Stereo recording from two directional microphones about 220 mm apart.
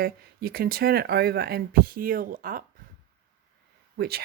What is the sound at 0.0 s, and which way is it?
A woman's voice, 45° right (ahead or behind).